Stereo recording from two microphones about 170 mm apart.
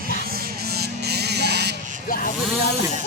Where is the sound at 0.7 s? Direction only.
75° right (ahead or behind).